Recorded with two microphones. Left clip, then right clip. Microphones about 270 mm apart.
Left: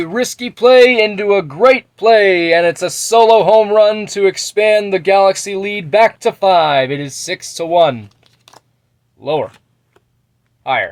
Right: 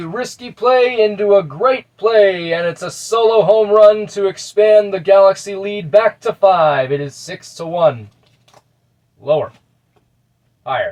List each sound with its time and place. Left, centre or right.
0.1 s speech: left